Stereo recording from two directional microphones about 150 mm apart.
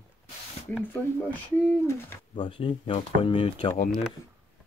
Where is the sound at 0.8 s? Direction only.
15° left (ahead or behind).